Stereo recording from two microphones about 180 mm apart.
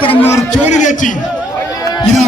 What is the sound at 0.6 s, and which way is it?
Speech, 40° left (ahead or behind).